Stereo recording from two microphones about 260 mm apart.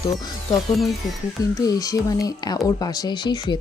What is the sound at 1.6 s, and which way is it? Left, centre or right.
A woman's voice, centre.